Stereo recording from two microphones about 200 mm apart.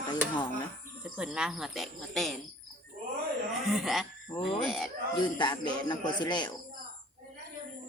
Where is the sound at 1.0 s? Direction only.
5° right (ahead or behind).